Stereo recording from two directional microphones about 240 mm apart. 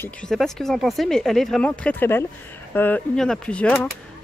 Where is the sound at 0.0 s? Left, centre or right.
Centre.